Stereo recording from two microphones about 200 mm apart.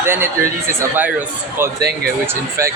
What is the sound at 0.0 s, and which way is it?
Speech, 10° right (ahead or behind).